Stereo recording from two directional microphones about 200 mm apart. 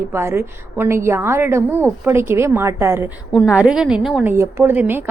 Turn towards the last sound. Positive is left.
turn(degrees=-10)  # may be behind; listen again after turning